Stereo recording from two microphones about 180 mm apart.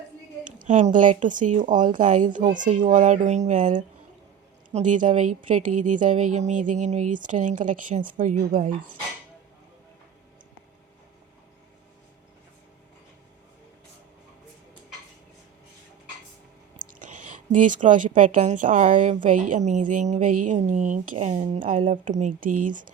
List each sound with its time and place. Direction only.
0.4 s a woman's voice: 45° right (ahead or behind)
16.9 s speech: 45° right (ahead or behind)